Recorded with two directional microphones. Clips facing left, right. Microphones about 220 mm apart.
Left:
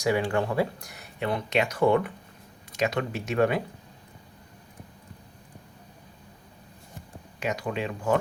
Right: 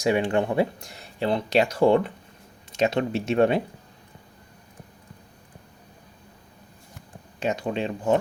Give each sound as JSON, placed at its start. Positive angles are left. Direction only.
{"t": 0.0, "sound": "speech", "side_deg": -20}
{"t": 7.3, "sound": "speech", "side_deg": -25}